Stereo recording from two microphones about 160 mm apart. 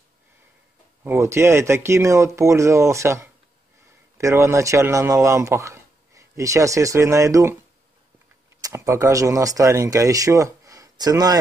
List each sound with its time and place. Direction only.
1.0 s a man's voice: 15° right (ahead or behind)
8.5 s speech: 20° right (ahead or behind)